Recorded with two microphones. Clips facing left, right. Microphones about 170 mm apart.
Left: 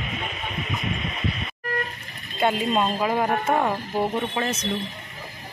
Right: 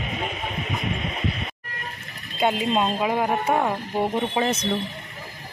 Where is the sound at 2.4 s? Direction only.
10° right (ahead or behind).